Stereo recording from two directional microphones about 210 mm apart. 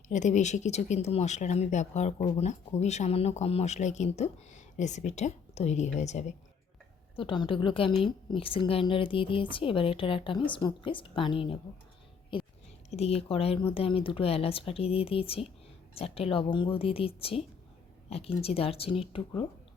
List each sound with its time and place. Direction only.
0.1 s a woman's voice: 35° left (ahead or behind)
12.9 s a woman's voice: 30° left (ahead or behind)
18.4 s a woman's voice: 25° left (ahead or behind)